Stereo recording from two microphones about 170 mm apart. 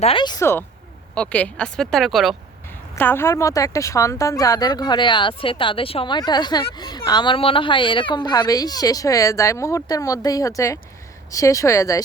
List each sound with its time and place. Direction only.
0.0 s speech: 30° left (ahead or behind)
1.1 s speech: 5° left (ahead or behind)
2.9 s speech: 15° left (ahead or behind)